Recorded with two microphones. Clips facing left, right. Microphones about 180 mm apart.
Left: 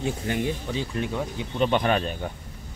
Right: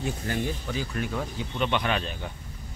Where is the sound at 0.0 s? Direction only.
25° left (ahead or behind).